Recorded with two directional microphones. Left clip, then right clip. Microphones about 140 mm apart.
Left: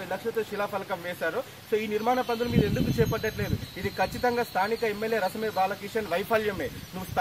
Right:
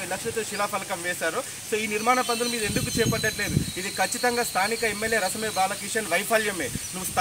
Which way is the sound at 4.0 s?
20° left (ahead or behind).